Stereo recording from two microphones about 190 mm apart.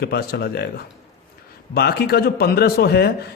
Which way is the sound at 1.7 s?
55° left (ahead or behind).